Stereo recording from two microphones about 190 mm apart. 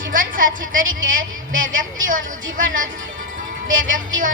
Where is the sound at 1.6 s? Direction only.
90° right.